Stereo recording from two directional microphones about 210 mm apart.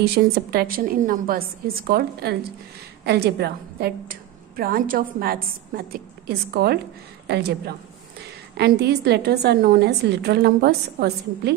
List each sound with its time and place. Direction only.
0.0 s a woman's voice: 45° right (ahead or behind)